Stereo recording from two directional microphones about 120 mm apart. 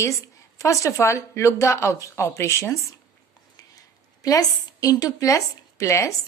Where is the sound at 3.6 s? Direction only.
30° left (ahead or behind).